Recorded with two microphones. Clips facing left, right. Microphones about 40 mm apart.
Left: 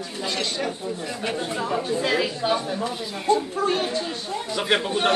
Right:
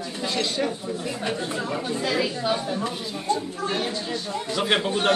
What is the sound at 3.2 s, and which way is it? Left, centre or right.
Speech, left.